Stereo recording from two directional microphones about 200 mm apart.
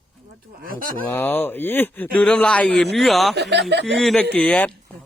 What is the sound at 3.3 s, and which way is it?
Speech, 55° right (ahead or behind).